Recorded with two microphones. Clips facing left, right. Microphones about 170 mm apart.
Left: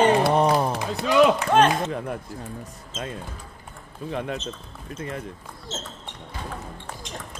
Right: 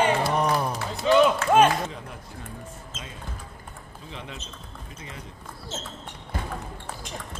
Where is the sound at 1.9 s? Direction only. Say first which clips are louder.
Left 10 dB; 55° left (ahead or behind).